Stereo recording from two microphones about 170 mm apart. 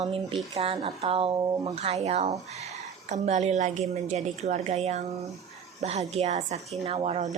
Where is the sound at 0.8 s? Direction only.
35° right (ahead or behind).